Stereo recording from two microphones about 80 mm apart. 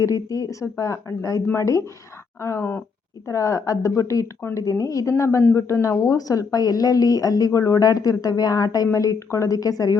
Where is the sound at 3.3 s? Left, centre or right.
Left.